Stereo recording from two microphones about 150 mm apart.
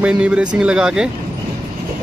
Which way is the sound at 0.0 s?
5° right (ahead or behind).